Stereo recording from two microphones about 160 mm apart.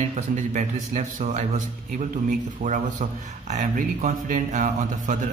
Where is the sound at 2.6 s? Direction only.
50° right (ahead or behind).